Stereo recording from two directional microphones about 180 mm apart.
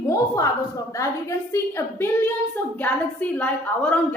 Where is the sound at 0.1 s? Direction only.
20° left (ahead or behind).